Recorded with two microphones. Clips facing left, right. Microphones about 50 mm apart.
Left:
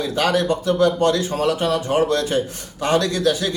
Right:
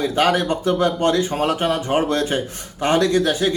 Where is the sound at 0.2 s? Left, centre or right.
Right.